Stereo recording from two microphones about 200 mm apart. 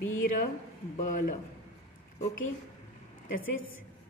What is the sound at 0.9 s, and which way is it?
Speech, 40° left (ahead or behind).